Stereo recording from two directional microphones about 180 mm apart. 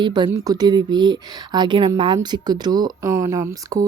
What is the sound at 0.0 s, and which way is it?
Speech, 25° right (ahead or behind).